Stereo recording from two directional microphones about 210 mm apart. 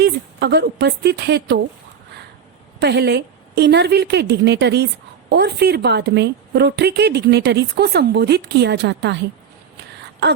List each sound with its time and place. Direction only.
0.0 s a woman's voice: 50° right (ahead or behind)
2.8 s a woman's voice: 50° right (ahead or behind)
10.0 s a sound: 55° right (ahead or behind)